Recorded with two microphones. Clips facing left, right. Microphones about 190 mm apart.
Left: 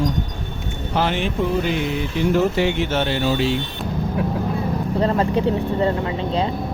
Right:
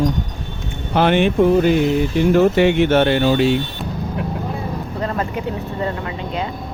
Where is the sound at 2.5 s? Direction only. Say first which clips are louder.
Right 6 dB; 60° right (ahead or behind).